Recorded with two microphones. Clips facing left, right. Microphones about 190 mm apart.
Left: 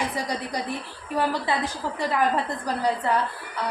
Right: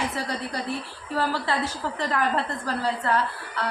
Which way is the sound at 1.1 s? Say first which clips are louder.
Left 1 dB; 15° left (ahead or behind).